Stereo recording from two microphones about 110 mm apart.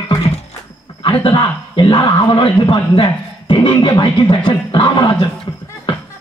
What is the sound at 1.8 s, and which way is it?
Speech, 45° left (ahead or behind).